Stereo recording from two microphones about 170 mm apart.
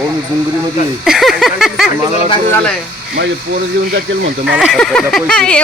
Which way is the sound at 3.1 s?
70° right (ahead or behind).